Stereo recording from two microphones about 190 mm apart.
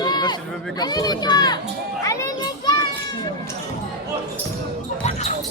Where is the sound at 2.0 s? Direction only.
15° left (ahead or behind).